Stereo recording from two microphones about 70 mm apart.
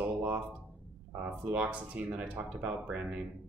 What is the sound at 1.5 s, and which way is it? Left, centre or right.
Speech, right.